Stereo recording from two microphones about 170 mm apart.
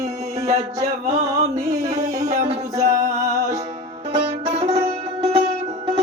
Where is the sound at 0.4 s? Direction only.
40° right (ahead or behind).